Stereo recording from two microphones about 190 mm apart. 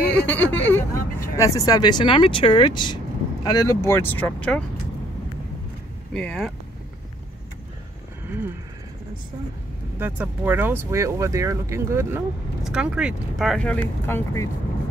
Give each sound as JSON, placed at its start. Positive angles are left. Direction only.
{"t": 0.1, "sound": "speech", "side_deg": 5}
{"t": 6.1, "sound": "speech", "side_deg": 5}
{"t": 9.9, "sound": "speech", "side_deg": -10}